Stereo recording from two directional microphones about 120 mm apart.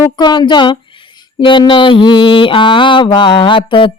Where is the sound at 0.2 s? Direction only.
40° left (ahead or behind).